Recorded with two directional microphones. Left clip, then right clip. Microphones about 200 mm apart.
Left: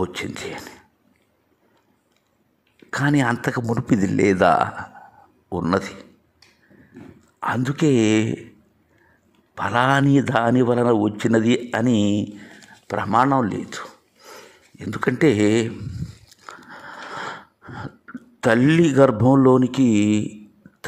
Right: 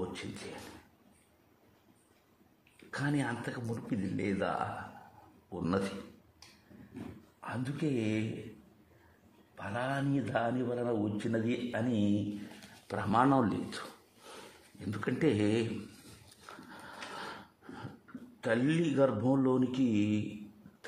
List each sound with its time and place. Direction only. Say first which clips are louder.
0.0 s a man's voice: left 14 dB; 45° left (ahead or behind)
2.9 s a man's voice: left 15 dB; 40° left (ahead or behind)
7.3 s a man's voice: left 17 dB; 50° left (ahead or behind)
9.6 s a man's voice: left 17 dB; 50° left (ahead or behind)
12.8 s speech: left 11 dB; 30° left (ahead or behind)
16.8 s a sound: left 12 dB; 35° left (ahead or behind)
18.0 s speech: left 16 dB; 40° left (ahead or behind)